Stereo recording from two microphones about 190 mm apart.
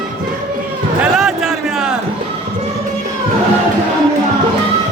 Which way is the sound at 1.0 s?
Centre (ahead or behind).